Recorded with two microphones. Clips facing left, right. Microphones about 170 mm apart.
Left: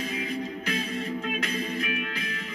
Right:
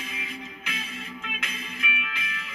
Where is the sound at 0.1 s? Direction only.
50° left (ahead or behind).